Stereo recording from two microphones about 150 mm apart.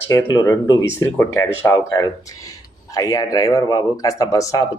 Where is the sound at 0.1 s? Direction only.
25° left (ahead or behind).